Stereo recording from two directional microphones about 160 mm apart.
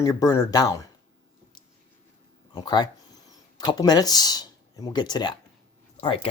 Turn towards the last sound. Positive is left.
turn(degrees=35)  # may be behind; listen again after turning